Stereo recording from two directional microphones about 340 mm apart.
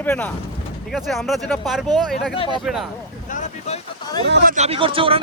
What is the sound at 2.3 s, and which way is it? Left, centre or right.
Speech, centre.